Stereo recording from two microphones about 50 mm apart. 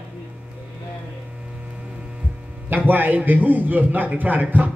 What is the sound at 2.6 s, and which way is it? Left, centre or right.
A man's voice, right.